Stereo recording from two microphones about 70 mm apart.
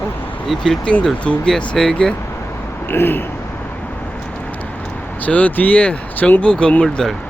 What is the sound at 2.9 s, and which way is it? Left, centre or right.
Speech, left.